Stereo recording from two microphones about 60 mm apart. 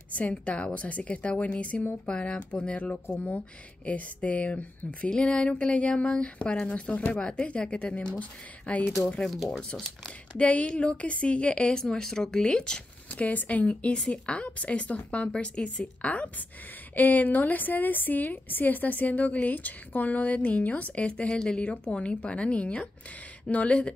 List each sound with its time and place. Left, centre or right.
0.1 s a woman's voice: left
8.8 s speech: centre
9.5 s speech: centre
13.1 s a woman's voice: left